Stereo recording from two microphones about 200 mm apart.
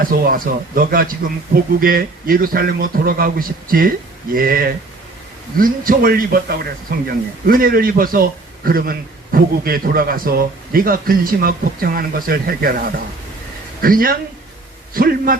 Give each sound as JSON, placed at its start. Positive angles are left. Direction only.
{"t": 0.0, "sound": "a man's voice", "side_deg": -45}